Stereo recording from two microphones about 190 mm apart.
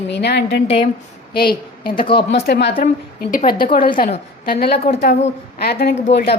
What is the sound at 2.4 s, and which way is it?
Speech, 65° left (ahead or behind).